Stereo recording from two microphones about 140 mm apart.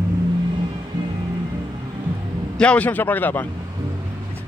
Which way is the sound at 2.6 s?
10° left (ahead or behind).